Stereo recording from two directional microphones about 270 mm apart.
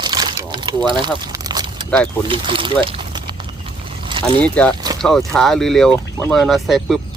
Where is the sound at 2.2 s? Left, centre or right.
Centre.